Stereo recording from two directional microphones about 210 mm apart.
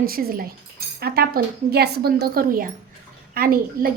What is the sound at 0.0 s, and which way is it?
A woman's voice, 45° right (ahead or behind).